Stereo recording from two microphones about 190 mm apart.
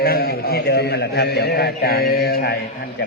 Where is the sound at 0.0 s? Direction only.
55° left (ahead or behind).